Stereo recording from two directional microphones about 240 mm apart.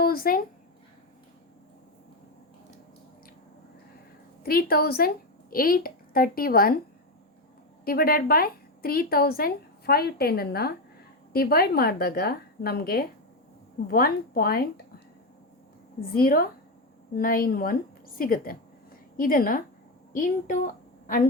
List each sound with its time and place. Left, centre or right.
0.0 s speech: left
4.4 s a woman's voice: left
7.9 s a woman's voice: left
16.1 s a woman's voice: left